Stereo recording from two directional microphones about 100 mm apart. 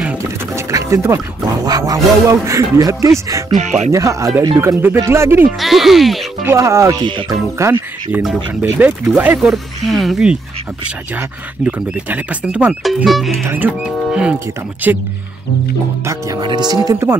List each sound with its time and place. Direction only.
0.2 s music: 30° right (ahead or behind)
1.7 s speech: 40° right (ahead or behind)
5.6 s speech: centre (ahead or behind)
6.4 s speech: 30° right (ahead or behind)
7.0 s speech: 55° right (ahead or behind)
7.2 s speech: 30° right (ahead or behind)
8.7 s speech: 15° right (ahead or behind)
9.4 s speech: centre (ahead or behind)
11.6 s speech: 15° right (ahead or behind)
12.8 s speech: centre (ahead or behind)
13.6 s speech: 10° right (ahead or behind)
16.3 s speech: 45° right (ahead or behind)